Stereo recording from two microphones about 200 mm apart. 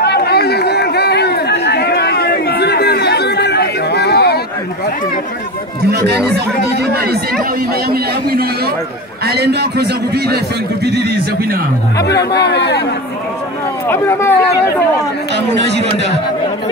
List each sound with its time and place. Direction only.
0.0 s chatter: 55° left (ahead or behind)
5.9 s a man's voice: 55° right (ahead or behind)
7.9 s a man's voice: 50° right (ahead or behind)
12.0 s speech: 55° left (ahead or behind)
13.8 s speech: 15° left (ahead or behind)